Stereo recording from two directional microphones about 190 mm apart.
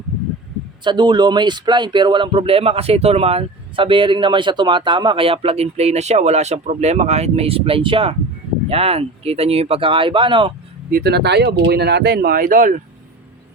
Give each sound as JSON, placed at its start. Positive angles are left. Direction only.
{"t": 0.9, "sound": "speech", "side_deg": -25}
{"t": 10.9, "sound": "speech", "side_deg": -60}